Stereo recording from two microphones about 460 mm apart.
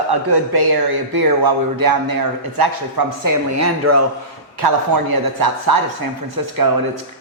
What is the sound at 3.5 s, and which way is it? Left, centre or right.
Speech, right.